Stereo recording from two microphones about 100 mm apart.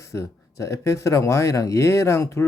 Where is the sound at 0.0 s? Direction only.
30° left (ahead or behind).